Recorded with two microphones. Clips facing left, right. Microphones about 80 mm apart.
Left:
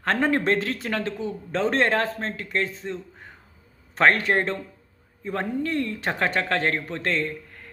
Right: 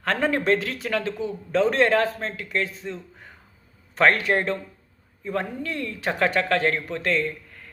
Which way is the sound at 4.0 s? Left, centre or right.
Left.